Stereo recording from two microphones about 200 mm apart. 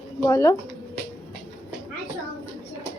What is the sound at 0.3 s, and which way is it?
Speech, 15° left (ahead or behind).